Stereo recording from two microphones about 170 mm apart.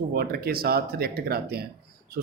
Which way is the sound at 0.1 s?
65° right (ahead or behind).